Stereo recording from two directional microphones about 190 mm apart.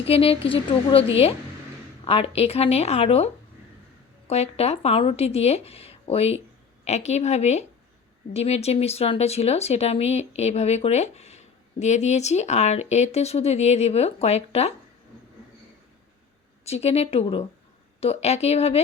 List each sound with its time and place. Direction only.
0.1 s a woman's voice: 30° left (ahead or behind)
4.3 s speech: 35° left (ahead or behind)
16.6 s speech: 35° left (ahead or behind)